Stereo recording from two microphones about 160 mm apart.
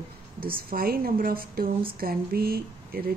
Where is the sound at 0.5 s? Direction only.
65° right (ahead or behind).